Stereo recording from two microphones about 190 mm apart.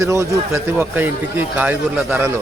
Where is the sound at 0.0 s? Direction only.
15° right (ahead or behind).